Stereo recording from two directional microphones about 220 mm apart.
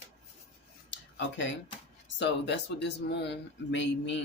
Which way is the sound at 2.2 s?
50° left (ahead or behind).